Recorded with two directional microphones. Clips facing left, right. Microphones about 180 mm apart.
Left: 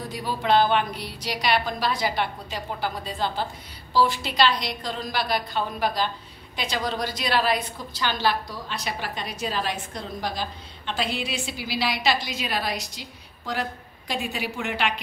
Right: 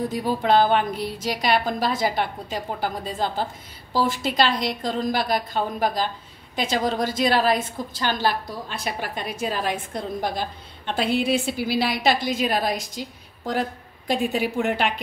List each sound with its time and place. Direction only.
0.1 s a woman's voice: 45° right (ahead or behind)